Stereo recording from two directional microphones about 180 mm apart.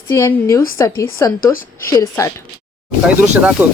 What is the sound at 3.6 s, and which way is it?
Speech, 10° right (ahead or behind).